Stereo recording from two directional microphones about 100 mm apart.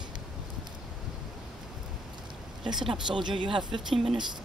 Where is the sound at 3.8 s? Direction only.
5° right (ahead or behind).